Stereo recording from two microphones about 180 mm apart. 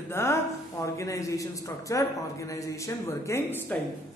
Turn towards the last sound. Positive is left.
turn(degrees=10)  # may be behind; listen again after turning